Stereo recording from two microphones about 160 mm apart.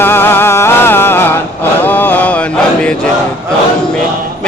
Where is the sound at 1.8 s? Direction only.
10° left (ahead or behind).